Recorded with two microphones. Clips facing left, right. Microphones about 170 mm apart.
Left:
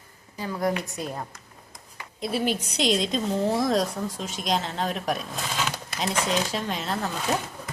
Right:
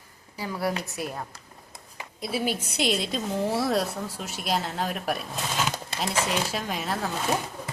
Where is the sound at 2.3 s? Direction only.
10° right (ahead or behind).